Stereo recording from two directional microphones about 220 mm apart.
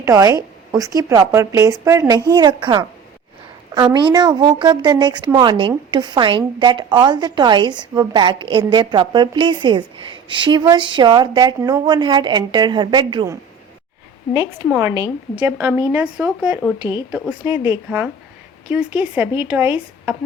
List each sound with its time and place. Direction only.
0.0 s a woman's voice: 15° right (ahead or behind)
14.3 s a woman's voice: 10° right (ahead or behind)